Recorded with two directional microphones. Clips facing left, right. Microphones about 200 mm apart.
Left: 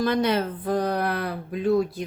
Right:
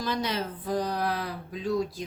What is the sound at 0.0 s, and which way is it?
Speech, 55° left (ahead or behind).